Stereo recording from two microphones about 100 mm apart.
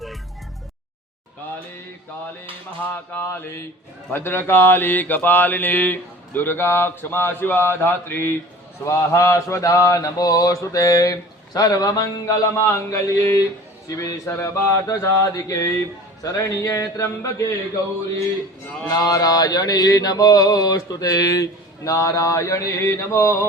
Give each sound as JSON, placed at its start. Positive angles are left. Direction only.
{"t": 3.1, "sound": "mantra", "side_deg": 20}
{"t": 18.9, "sound": "mantra", "side_deg": 35}